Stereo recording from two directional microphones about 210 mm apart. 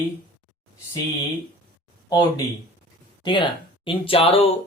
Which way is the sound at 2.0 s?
20° left (ahead or behind).